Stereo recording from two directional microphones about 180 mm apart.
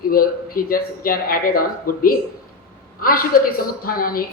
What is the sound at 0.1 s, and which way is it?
A man's voice, 55° left (ahead or behind).